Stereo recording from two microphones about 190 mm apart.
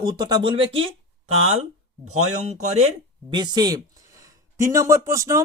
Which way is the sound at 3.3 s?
20° right (ahead or behind).